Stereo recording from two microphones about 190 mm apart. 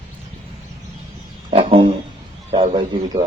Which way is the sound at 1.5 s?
30° right (ahead or behind).